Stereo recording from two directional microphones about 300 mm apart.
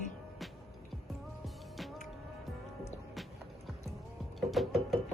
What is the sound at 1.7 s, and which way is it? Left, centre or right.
Music, centre.